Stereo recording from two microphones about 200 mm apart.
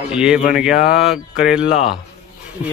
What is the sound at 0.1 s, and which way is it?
Speech, 5° right (ahead or behind).